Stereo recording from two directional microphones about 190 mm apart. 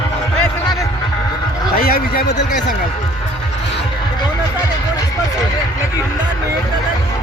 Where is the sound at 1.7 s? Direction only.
50° left (ahead or behind).